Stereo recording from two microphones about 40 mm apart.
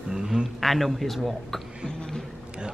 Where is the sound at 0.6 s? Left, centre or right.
Centre.